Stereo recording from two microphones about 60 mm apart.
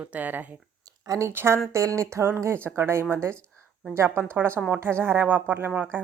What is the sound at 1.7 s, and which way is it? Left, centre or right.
Speech, right.